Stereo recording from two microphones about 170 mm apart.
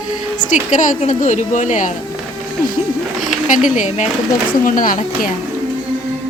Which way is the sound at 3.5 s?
50° left (ahead or behind).